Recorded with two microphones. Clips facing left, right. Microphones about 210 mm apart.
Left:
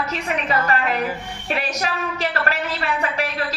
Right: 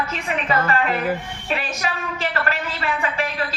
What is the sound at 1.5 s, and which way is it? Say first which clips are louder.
Speech: left 1 dB; 40° left (ahead or behind).